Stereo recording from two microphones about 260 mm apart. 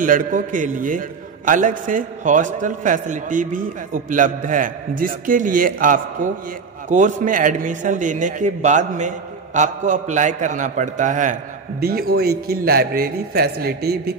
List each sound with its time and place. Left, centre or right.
0.0 s a man's voice: right